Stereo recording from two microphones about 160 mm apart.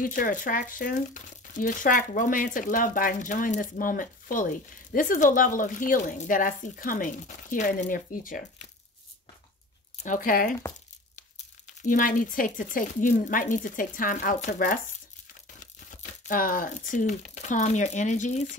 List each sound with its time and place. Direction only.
0.0 s speech: 60° left (ahead or behind)
10.0 s speech: 55° left (ahead or behind)
15.6 s speech: 55° left (ahead or behind)